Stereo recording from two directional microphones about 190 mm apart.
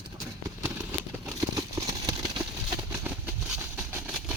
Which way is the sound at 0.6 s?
10° right (ahead or behind).